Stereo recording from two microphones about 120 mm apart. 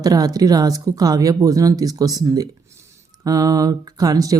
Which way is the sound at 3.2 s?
30° right (ahead or behind).